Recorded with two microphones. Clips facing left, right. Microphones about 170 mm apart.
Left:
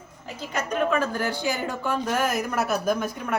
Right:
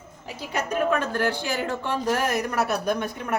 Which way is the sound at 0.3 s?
10° right (ahead or behind).